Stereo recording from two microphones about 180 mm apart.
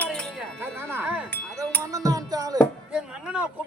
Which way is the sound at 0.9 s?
10° right (ahead or behind).